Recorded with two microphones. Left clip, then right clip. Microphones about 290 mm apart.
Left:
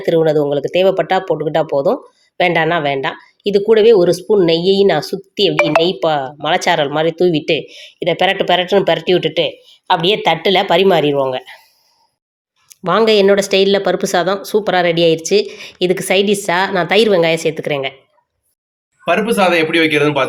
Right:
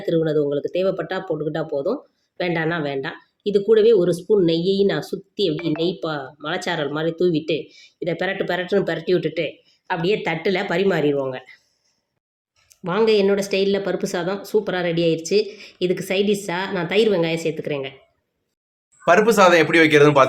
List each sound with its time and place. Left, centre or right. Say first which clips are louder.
0.0 s speech: left 7 dB; centre
9.4 s a sound: left 9 dB; left
10.2 s speech: left 9 dB; centre
12.6 s speech: left 6 dB; centre
19.0 s a man's voice: even; centre